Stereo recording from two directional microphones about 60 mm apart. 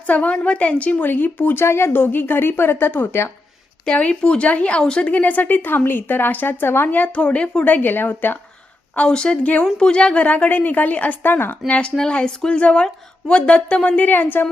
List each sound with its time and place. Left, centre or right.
0.1 s a woman's voice: left
3.8 s speech: centre
7.2 s a woman's voice: centre
7.6 s a woman's voice: left
9.0 s speech: centre; by 11.5 s left
11.7 s a woman's voice: centre; by 14.4 s left